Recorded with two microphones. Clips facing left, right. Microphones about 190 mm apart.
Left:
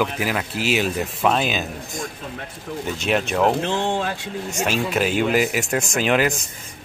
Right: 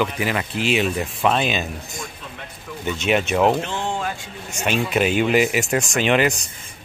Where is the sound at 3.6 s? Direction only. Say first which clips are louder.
Left 3 dB; 85° left.